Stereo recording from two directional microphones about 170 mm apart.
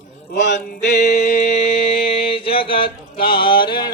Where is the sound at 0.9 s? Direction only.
70° left (ahead or behind).